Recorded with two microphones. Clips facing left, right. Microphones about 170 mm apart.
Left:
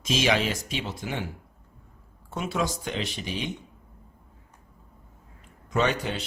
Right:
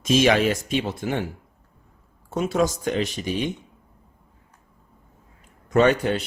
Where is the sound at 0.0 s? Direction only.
50° right (ahead or behind).